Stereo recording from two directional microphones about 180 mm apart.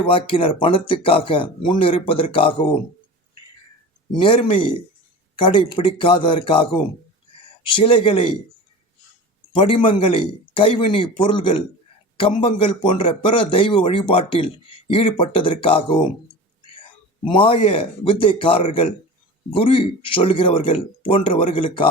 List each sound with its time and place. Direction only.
0.0 s speech: 30° left (ahead or behind)
4.2 s speech: 30° left (ahead or behind)
9.6 s speech: 30° left (ahead or behind)
17.2 s speech: 30° left (ahead or behind)